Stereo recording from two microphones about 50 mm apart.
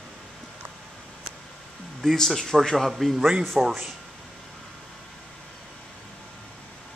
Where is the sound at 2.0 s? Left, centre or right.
Centre.